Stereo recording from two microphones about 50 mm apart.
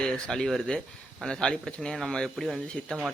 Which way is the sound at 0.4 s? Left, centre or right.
Centre.